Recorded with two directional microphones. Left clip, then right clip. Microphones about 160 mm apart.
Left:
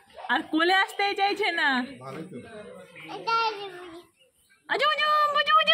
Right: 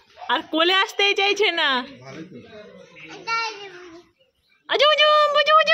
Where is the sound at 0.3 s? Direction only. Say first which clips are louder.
Right 4 dB; 35° right (ahead or behind).